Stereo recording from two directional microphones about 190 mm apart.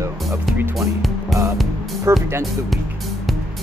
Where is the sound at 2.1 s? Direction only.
15° right (ahead or behind).